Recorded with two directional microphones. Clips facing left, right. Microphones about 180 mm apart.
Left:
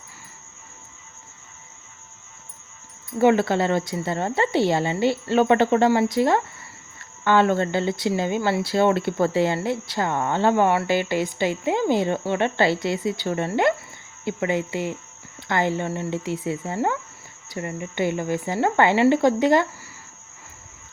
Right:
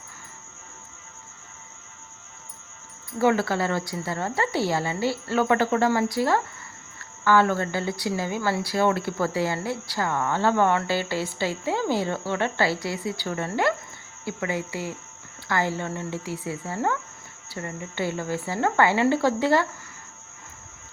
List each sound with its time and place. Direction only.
3.2 s speech: 20° left (ahead or behind)